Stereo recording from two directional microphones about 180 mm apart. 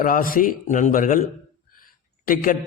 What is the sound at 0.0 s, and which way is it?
A man's voice, 50° left (ahead or behind).